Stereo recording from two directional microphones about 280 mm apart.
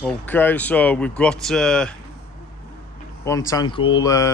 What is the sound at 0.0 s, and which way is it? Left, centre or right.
Speech, centre.